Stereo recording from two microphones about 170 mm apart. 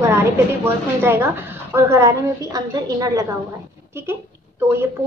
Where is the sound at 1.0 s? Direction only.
15° right (ahead or behind).